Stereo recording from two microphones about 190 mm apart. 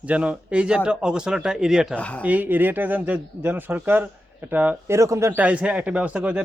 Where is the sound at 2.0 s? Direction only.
5° left (ahead or behind).